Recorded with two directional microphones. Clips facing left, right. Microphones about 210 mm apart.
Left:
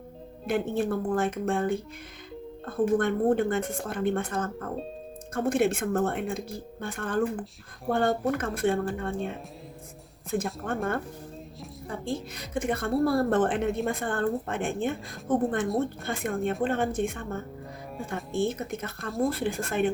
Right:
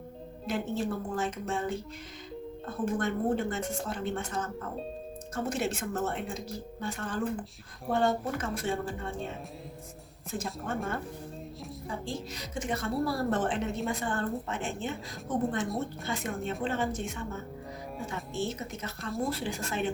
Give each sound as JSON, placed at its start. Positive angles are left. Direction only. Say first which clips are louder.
{"t": 0.4, "sound": "a woman's voice", "louder": "left 5 dB", "side_deg": 55}
{"t": 10.3, "sound": "a woman's voice", "louder": "left 5 dB", "side_deg": 55}
{"t": 12.0, "sound": "a woman's voice", "louder": "left 4 dB", "side_deg": 55}